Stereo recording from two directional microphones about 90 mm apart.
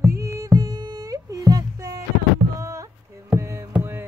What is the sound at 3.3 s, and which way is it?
Music, 30° right (ahead or behind).